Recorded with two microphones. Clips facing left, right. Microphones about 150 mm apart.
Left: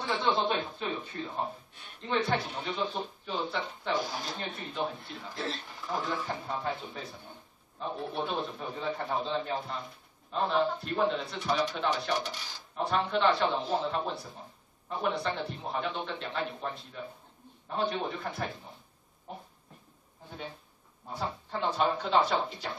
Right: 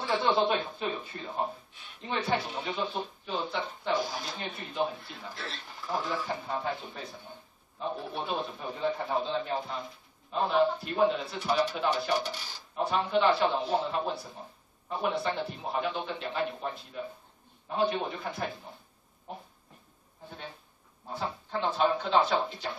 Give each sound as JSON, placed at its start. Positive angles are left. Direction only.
{"t": 0.2, "sound": "speech", "side_deg": -5}
{"t": 2.0, "sound": "a man's voice", "side_deg": -5}
{"t": 5.3, "sound": "speech", "side_deg": 35}
{"t": 5.9, "sound": "a man's voice", "side_deg": 0}
{"t": 21.2, "sound": "a man's voice", "side_deg": 0}